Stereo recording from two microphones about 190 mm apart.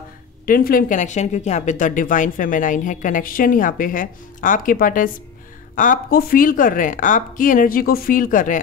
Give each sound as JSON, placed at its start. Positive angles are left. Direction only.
{"t": 0.5, "sound": "speech", "side_deg": 50}